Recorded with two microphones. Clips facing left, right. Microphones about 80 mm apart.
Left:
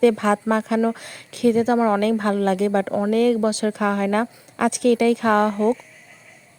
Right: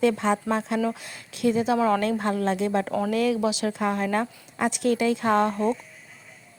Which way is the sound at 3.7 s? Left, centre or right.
Left.